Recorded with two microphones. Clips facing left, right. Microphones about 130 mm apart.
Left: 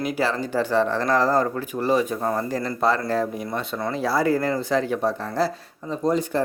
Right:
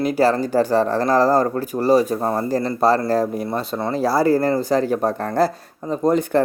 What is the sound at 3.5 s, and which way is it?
Speech, 30° right (ahead or behind).